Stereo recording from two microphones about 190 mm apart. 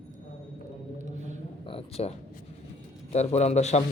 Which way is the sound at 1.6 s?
30° left (ahead or behind).